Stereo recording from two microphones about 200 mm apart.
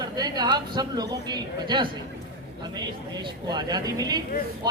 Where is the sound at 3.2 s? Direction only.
20° right (ahead or behind).